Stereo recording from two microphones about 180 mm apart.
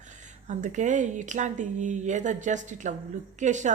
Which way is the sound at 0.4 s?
40° right (ahead or behind).